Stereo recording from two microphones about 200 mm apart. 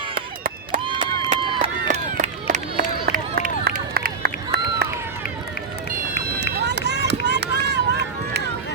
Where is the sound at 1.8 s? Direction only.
35° right (ahead or behind).